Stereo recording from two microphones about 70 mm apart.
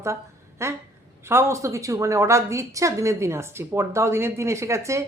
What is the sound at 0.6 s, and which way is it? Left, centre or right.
A woman's voice, right.